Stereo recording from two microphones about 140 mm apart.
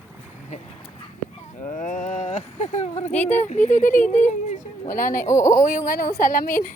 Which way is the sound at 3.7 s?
65° left (ahead or behind).